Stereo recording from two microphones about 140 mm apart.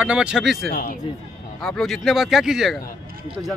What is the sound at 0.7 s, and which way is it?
Speech, 90° left.